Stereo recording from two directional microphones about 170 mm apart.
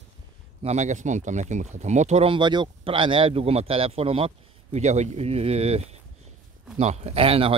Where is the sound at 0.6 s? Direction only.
45° right (ahead or behind).